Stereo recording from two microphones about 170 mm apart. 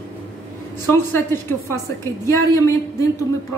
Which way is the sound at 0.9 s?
15° left (ahead or behind).